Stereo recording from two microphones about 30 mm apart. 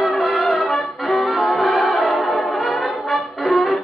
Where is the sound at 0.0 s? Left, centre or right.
Centre.